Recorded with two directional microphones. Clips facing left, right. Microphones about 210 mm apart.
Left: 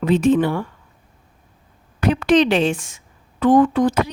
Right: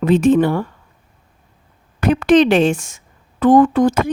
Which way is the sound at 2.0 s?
50° right (ahead or behind).